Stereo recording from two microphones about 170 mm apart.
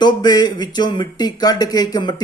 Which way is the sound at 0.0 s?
25° left (ahead or behind).